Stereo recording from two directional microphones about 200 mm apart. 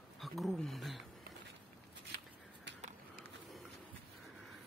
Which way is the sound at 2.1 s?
60° right (ahead or behind).